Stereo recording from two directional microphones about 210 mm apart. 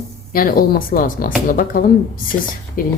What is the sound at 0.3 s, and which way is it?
A woman's voice, 45° left (ahead or behind).